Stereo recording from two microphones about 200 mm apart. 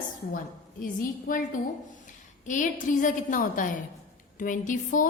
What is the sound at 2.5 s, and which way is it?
A woman's voice, 40° left (ahead or behind).